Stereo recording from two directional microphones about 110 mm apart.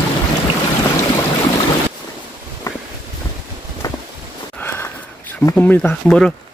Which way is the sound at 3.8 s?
30° left (ahead or behind).